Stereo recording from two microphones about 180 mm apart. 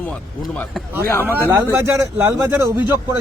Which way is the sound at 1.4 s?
15° right (ahead or behind).